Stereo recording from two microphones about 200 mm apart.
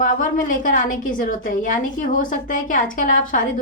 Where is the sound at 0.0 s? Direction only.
40° left (ahead or behind).